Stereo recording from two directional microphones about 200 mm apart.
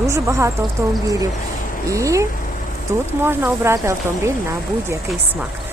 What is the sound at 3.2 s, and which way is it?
Speech, 10° right (ahead or behind).